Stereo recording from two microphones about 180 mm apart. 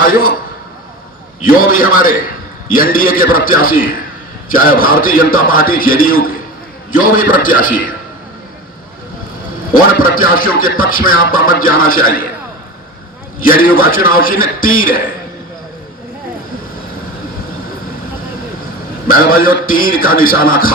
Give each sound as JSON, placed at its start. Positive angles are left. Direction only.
{"t": 0.0, "sound": "a man's voice", "side_deg": 50}
{"t": 1.5, "sound": "music", "side_deg": 50}
{"t": 9.7, "sound": "music", "side_deg": 50}
{"t": 13.4, "sound": "music", "side_deg": 50}
{"t": 19.0, "sound": "music", "side_deg": 50}